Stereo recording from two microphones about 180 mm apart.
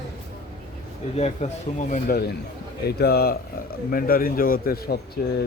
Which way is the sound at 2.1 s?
65° left (ahead or behind).